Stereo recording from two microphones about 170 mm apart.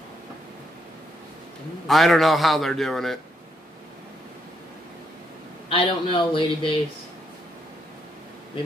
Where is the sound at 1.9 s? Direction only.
Centre (ahead or behind).